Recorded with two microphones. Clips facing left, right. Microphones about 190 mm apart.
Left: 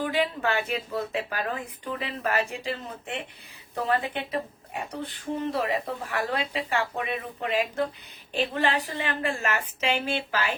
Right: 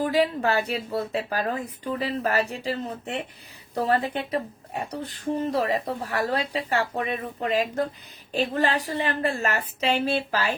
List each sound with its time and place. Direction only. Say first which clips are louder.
0.0 s speech: right 4 dB; 40° right (ahead or behind)